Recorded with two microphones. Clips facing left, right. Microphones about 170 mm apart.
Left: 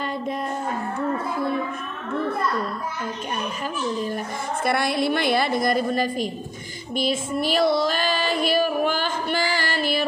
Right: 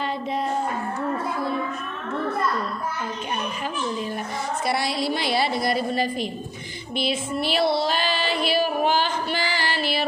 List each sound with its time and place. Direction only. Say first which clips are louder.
0.0 s a sound: right 1 dB; 50° left (ahead or behind)
4.6 s a woman's voice: left 4 dB; 55° left (ahead or behind)
6.9 s female singing: left 2 dB; 45° left (ahead or behind)